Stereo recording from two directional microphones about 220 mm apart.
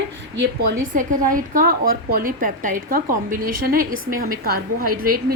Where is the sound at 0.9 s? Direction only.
35° right (ahead or behind).